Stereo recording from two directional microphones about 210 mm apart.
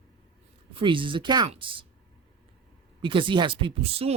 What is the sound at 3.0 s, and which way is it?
Speech, 25° right (ahead or behind).